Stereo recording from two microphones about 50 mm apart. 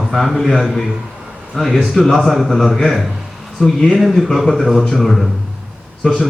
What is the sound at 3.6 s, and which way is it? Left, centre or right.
Speech, centre.